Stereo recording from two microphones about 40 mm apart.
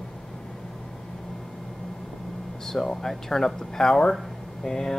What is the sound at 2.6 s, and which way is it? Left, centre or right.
Speech, centre.